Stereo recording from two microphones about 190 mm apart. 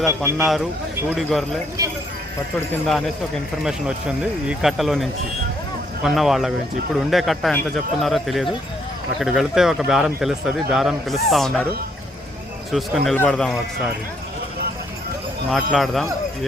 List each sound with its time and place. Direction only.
0.1 s a man's voice: 10° right (ahead or behind)
1.1 s speech: centre (ahead or behind)
1.8 s a man's voice: 20° right (ahead or behind)
2.6 s speech: 5° left (ahead or behind)
12.7 s speech: centre (ahead or behind)
15.4 s speech: 5° left (ahead or behind)